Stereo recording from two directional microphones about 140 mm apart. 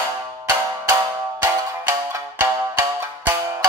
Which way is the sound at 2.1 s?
15° right (ahead or behind).